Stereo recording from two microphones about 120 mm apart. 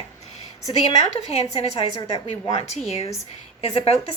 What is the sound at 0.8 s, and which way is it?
A woman's voice, 60° left (ahead or behind).